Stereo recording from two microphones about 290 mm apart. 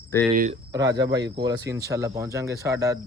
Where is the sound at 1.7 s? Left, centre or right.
Centre.